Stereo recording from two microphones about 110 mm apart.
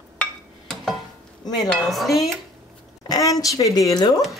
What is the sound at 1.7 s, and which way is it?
Dishes, centre (ahead or behind).